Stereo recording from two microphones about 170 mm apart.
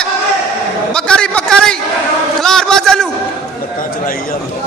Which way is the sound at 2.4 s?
5° left (ahead or behind).